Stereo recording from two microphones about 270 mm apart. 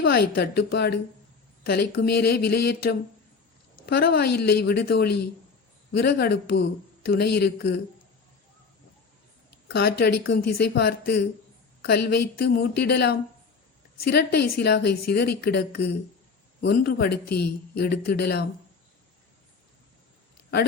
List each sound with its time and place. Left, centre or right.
0.0 s speech: left
9.6 s speech: left